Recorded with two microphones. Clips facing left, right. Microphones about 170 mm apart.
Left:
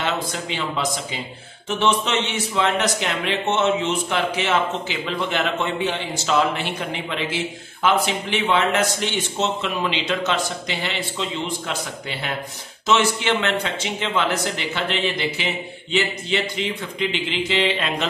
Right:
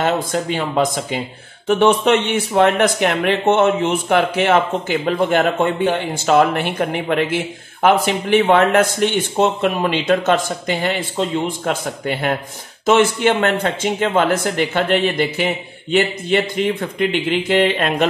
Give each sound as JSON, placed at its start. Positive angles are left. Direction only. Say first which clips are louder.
{"t": 0.0, "sound": "a man's voice", "louder": "right 7 dB", "side_deg": -50}